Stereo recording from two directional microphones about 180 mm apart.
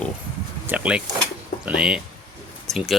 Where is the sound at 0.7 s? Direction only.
5° right (ahead or behind).